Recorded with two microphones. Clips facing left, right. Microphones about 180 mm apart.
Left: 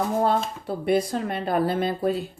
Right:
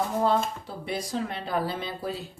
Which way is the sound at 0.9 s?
55° left (ahead or behind).